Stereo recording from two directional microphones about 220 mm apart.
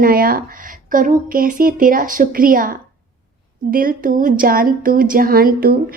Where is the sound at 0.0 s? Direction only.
40° right (ahead or behind).